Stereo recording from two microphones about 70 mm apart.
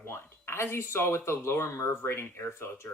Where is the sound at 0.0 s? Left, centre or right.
Left.